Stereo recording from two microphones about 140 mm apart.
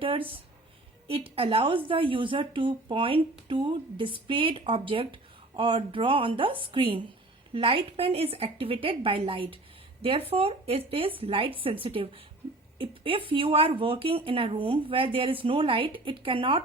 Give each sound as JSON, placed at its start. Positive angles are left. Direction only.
{"t": 0.0, "sound": "speech", "side_deg": -40}